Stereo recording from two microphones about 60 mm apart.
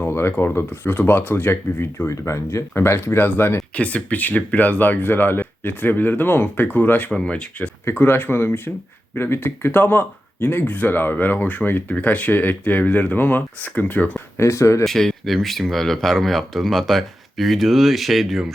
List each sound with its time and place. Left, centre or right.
0.0 s speech: left
3.8 s speech: left
7.1 s speech: centre
7.9 s speech: left
14.3 s speech: left
14.8 s speech: centre